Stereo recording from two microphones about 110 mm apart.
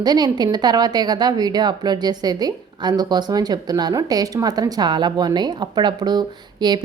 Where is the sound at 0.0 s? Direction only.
40° right (ahead or behind).